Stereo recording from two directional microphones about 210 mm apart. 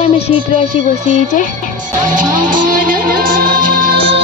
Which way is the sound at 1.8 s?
40° right (ahead or behind).